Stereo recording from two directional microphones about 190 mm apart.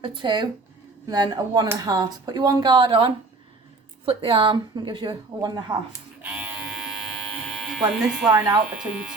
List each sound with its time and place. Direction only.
0.0 s speech: 25° right (ahead or behind)
6.2 s electric shaver: 5° right (ahead or behind)
8.3 s speech: 25° right (ahead or behind)